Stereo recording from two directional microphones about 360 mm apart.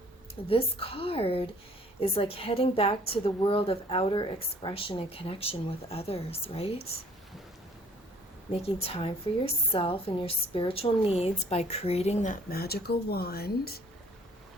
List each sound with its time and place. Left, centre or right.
0.4 s a woman's voice: centre
8.6 s a woman's voice: centre